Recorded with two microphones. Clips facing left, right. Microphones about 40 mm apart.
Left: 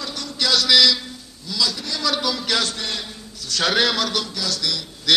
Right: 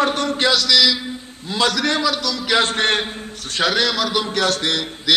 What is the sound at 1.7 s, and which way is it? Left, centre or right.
Speech, right.